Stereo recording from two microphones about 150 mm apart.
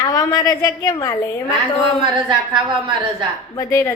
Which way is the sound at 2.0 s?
30° right (ahead or behind).